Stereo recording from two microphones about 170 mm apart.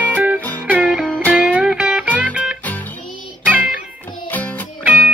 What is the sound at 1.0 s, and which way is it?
Music, 5° left (ahead or behind).